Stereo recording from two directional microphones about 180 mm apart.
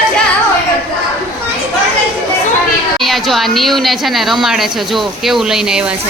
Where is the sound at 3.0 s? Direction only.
Centre (ahead or behind).